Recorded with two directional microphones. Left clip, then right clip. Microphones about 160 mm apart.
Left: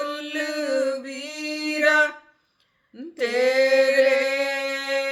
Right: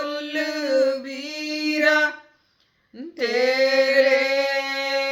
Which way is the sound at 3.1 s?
30° left (ahead or behind).